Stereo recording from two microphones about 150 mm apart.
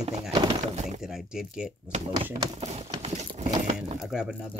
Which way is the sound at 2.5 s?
45° right (ahead or behind).